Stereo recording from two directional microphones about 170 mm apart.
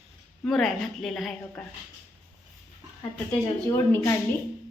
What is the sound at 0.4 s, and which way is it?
A woman's voice, centre (ahead or behind).